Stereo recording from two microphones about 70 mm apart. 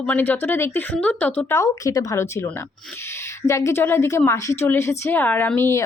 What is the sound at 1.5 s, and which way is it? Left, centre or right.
Speech, left.